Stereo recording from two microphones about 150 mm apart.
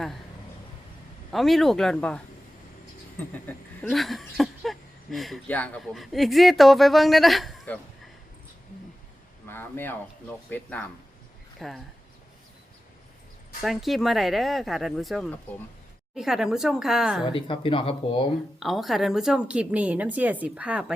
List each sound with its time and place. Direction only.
1.3 s a man's voice: centre (ahead or behind)
3.2 s a sound: 10° left (ahead or behind)
5.5 s a man's voice: 10° left (ahead or behind)
9.5 s speech: 15° left (ahead or behind)
11.6 s a man's voice: centre (ahead or behind)
13.6 s a man's voice: centre (ahead or behind)
17.2 s speech: 35° left (ahead or behind)
18.6 s a woman's voice: centre (ahead or behind)